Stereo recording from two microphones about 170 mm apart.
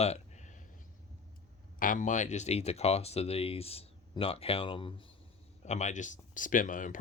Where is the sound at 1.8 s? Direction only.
50° left (ahead or behind); by 4.9 s 30° left (ahead or behind).